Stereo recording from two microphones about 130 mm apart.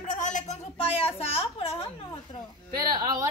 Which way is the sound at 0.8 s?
50° left (ahead or behind).